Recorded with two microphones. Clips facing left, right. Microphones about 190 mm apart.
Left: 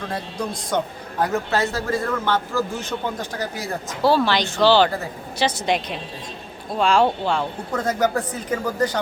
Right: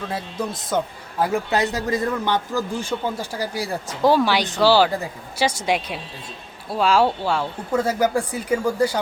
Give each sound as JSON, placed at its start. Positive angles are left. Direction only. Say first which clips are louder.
{"t": 0.1, "sound": "speech", "louder": "even", "side_deg": -5}